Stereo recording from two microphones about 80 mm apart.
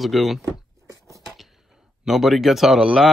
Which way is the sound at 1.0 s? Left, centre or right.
Right.